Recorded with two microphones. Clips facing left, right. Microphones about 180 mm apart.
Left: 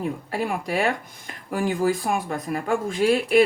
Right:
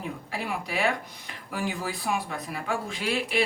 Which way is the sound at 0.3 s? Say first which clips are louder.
Left 4 dB; 45° left (ahead or behind).